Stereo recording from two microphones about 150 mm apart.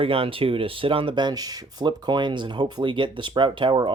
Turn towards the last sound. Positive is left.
turn(degrees=-30)  # may be behind; listen again after turning